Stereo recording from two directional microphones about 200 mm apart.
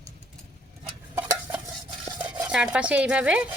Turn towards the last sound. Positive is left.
turn(degrees=-5)  # may be behind; listen again after turning